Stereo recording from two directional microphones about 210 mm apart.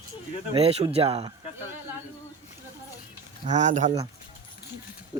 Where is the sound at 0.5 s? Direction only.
30° right (ahead or behind).